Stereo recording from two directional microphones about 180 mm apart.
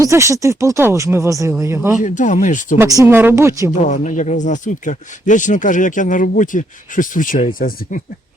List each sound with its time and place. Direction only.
0.0 s speech: 15° right (ahead or behind)
2.0 s speech: 45° left (ahead or behind)
2.7 s speech: 20° right (ahead or behind)
3.8 s speech: 40° left (ahead or behind)